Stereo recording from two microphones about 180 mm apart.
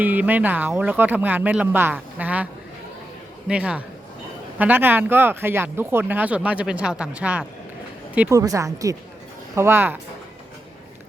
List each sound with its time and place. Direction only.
0.0 s a woman's voice: 10° right (ahead or behind)